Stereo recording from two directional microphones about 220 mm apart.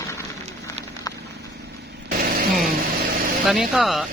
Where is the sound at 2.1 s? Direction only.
40° right (ahead or behind).